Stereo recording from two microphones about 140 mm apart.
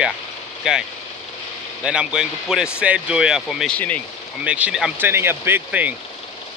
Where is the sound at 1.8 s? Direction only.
5° right (ahead or behind).